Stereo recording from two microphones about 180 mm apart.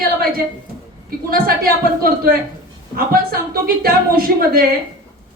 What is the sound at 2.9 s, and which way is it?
A woman's voice, 55° right (ahead or behind).